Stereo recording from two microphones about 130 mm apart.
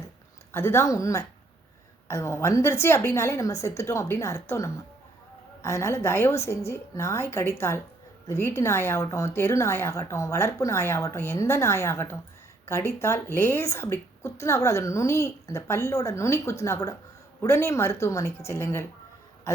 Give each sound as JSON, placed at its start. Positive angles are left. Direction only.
{"t": 0.5, "sound": "a woman's voice", "side_deg": 20}